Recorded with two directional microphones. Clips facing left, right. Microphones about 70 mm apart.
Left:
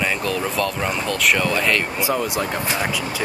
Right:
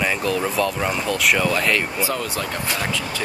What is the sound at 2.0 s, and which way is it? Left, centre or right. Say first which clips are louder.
Speech: left 3 dB; centre.